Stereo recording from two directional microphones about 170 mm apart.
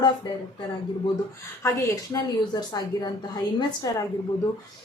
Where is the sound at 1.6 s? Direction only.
20° left (ahead or behind).